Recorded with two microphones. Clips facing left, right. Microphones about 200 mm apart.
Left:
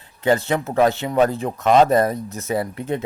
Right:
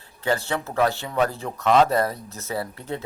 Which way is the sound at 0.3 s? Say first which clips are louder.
Left 6 dB; 20° left (ahead or behind).